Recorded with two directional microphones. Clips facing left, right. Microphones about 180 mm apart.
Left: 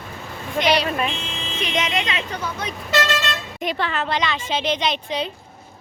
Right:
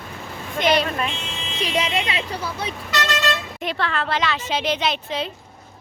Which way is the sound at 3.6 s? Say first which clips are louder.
Left 1 dB; centre (ahead or behind).